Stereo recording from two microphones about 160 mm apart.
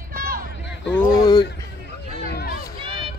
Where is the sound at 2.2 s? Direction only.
80° left.